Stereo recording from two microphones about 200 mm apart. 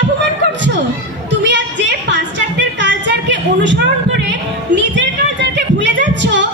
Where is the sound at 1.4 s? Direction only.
60° right (ahead or behind).